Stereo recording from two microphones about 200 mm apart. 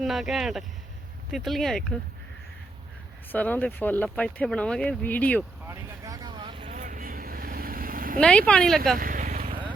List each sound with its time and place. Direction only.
0.0 s speech: centre (ahead or behind)
3.3 s speech: 10° left (ahead or behind)
5.6 s vehicle: 20° right (ahead or behind)
6.7 s vehicle: 40° right (ahead or behind)
8.2 s speech: 5° left (ahead or behind)
9.0 s vehicle: 45° right (ahead or behind)